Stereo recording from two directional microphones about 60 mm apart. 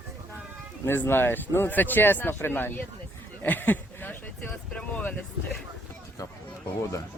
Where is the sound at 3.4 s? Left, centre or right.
Left.